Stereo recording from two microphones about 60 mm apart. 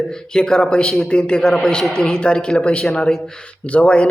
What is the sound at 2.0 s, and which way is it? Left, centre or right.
Speech, centre.